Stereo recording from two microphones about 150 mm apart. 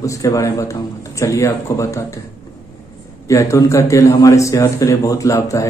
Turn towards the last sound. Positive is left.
turn(degrees=20)  # may be behind; listen again after turning